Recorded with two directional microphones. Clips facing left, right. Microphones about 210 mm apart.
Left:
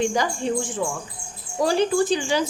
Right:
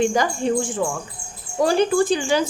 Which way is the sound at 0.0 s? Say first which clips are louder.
Right 3 dB; 55° right (ahead or behind).